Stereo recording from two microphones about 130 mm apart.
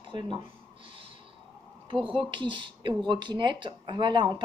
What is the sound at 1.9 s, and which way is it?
Speech, 40° right (ahead or behind).